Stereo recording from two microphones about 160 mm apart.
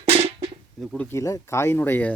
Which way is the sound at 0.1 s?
35° right (ahead or behind).